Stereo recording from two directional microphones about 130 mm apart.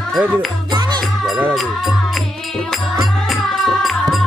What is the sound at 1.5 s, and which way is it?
Speech, centre (ahead or behind).